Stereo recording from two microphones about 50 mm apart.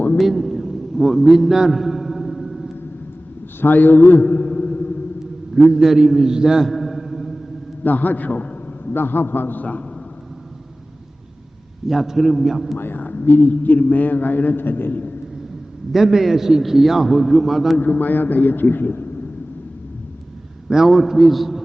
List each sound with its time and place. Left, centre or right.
0.2 s a sound: centre
3.6 s a man's voice: left
4.4 s music: left
5.5 s a man's voice: centre
7.9 s a man's voice: left
8.9 s a man's voice: left
11.9 s a man's voice: centre
12.7 s a man's voice: left
15.9 s a man's voice: centre
17.7 s a man's voice: left
20.7 s a man's voice: centre